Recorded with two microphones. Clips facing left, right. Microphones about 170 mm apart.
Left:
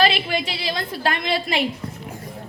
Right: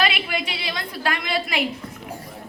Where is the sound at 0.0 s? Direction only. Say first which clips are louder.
Left 4 dB; 35° left (ahead or behind).